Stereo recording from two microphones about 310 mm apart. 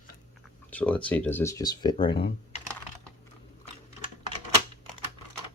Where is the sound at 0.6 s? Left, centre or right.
Centre.